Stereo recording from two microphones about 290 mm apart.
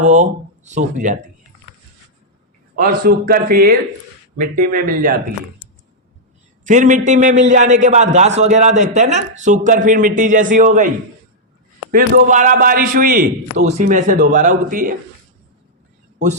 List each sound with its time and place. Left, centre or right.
0.0 s speech: right
2.7 s a man's voice: right
6.7 s a man's voice: right